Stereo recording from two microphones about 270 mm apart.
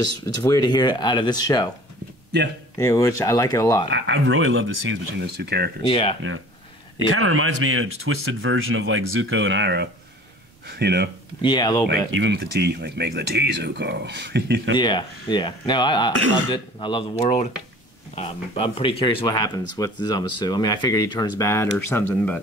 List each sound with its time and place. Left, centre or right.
0.0 s speech: centre
2.8 s speech: centre
3.9 s speech: right
5.8 s speech: centre
7.1 s speech: right
11.4 s speech: centre
12.1 s speech: right
14.8 s speech: centre